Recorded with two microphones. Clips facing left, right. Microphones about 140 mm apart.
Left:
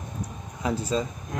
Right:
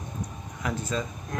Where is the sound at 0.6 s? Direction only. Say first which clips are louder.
Left 4 dB; 30° left (ahead or behind).